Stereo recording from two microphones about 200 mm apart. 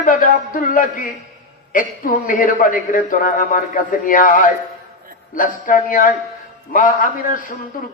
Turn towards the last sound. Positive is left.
turn(degrees=45)  # may be behind; listen again after turning